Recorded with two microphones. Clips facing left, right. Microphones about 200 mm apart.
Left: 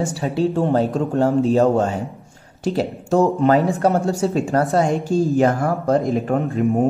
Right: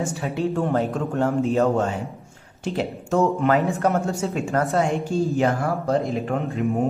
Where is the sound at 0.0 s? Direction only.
30° left (ahead or behind).